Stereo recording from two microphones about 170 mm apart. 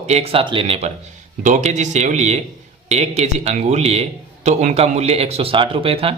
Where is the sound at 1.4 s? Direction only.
45° right (ahead or behind).